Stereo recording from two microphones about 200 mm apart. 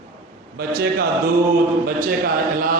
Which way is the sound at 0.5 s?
50° right (ahead or behind).